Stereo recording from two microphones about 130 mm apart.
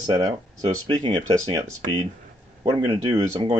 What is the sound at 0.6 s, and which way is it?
Speech, 55° right (ahead or behind).